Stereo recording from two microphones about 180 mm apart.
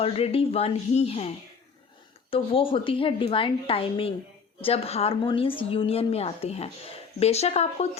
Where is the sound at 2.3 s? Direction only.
30° left (ahead or behind).